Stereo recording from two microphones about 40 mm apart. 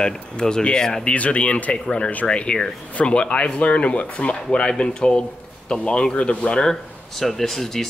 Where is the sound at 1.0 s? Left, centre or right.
Left.